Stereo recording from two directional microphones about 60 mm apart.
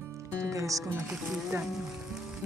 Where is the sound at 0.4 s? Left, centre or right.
Right.